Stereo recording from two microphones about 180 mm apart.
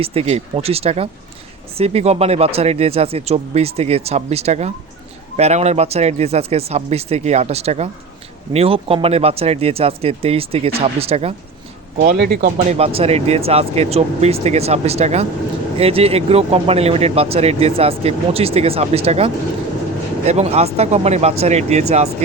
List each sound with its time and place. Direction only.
0.0 s speech: 35° right (ahead or behind)
12.1 s speech: 65° right (ahead or behind)
12.7 s speech: 35° right (ahead or behind)